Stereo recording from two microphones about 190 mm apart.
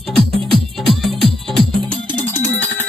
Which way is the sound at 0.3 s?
Centre (ahead or behind).